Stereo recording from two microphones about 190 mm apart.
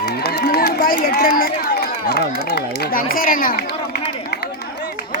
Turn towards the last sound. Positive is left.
turn(degrees=50)  # may be behind; listen again after turning